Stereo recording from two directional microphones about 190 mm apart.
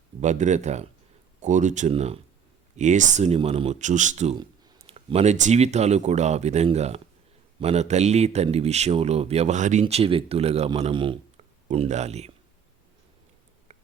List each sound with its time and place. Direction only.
0.2 s speech: 40° right (ahead or behind)
4.4 s speech: 25° right (ahead or behind)
9.8 s speech: 30° right (ahead or behind)
13.7 s a sound: 35° right (ahead or behind)